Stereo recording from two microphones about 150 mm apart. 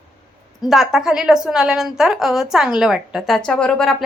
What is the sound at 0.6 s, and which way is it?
Speech, centre (ahead or behind).